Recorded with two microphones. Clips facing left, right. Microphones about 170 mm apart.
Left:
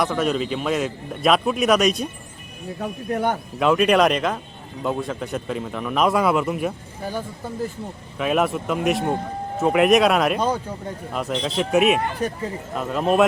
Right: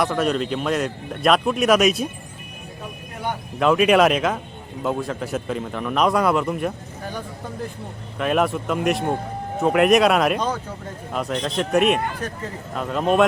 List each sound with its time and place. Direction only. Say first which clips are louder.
0.0 s a man's voice: right 1 dB; centre (ahead or behind)
3.6 s a man's voice: right 1 dB; centre (ahead or behind)
8.2 s a man's voice: even; centre (ahead or behind)